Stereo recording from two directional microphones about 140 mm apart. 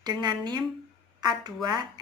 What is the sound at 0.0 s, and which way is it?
A woman's voice, 30° right (ahead or behind).